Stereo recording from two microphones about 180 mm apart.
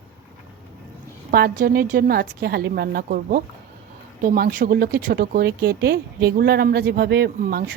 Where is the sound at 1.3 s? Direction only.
55° right (ahead or behind).